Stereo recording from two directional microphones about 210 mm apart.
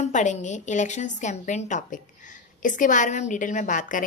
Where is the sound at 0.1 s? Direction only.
35° left (ahead or behind).